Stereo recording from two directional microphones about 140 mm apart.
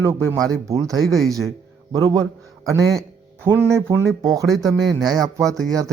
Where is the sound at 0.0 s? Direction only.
20° right (ahead or behind).